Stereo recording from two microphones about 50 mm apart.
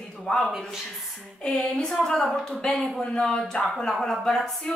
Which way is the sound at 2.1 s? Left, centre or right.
Centre.